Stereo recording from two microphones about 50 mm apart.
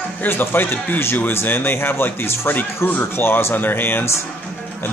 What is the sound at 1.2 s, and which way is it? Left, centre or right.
Speech, left.